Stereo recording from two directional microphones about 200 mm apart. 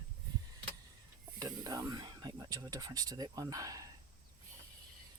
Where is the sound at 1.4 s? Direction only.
15° right (ahead or behind).